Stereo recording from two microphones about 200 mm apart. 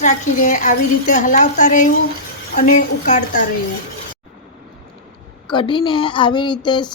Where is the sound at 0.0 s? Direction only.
40° left (ahead or behind).